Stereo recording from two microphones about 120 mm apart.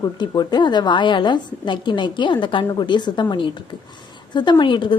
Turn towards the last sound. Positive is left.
turn(degrees=40)  # may be behind; listen again after turning